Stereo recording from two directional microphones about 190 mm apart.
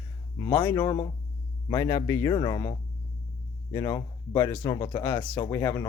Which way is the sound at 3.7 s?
20° left (ahead or behind).